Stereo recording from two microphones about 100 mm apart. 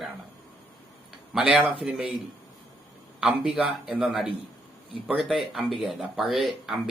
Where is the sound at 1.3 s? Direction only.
10° right (ahead or behind).